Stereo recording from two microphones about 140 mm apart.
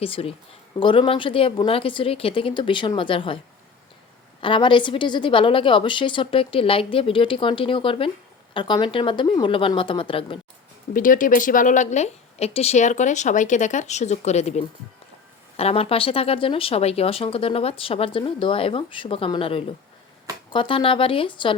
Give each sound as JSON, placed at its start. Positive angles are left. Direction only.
{"t": 0.0, "sound": "speech", "side_deg": 45}
{"t": 4.4, "sound": "speech", "side_deg": 35}
{"t": 10.9, "sound": "a woman's voice", "side_deg": 75}